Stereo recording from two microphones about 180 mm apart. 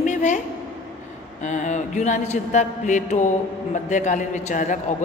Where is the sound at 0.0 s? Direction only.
40° left (ahead or behind).